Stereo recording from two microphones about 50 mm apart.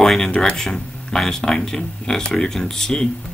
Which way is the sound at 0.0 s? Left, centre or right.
Centre.